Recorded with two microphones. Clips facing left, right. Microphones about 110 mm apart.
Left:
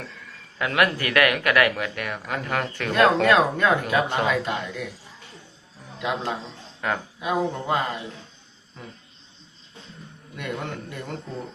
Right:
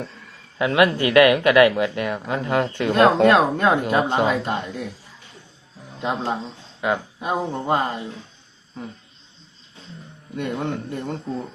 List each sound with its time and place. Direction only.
0.6 s speech: 25° right (ahead or behind)
6.0 s speech: 30° right (ahead or behind)
6.8 s speech: 15° right (ahead or behind)
7.7 s speech: 35° right (ahead or behind)
10.3 s speech: 25° right (ahead or behind)